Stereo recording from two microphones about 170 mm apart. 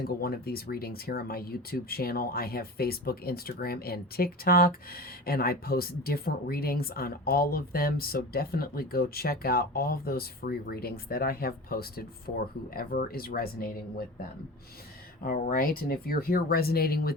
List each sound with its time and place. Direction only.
0.2 s speech: 65° left (ahead or behind)
15.2 s speech: 60° left (ahead or behind)